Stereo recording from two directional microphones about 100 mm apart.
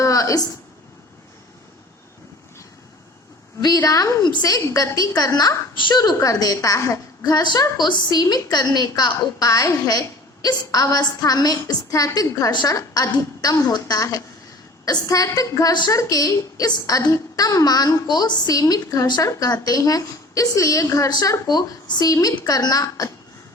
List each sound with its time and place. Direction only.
0.0 s a sound: 30° left (ahead or behind)
3.8 s a woman's voice: 30° left (ahead or behind)
4.2 s a woman's voice: 45° left (ahead or behind)